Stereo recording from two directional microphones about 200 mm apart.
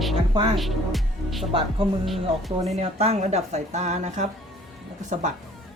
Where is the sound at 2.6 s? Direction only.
30° right (ahead or behind).